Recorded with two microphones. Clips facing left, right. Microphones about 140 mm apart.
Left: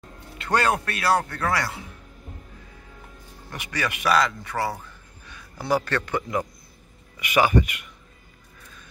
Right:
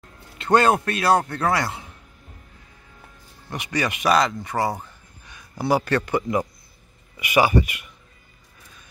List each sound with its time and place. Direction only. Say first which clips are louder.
0.4 s a man's voice: right 5 dB; 25° right (ahead or behind)
3.5 s a man's voice: right 4 dB; 20° right (ahead or behind)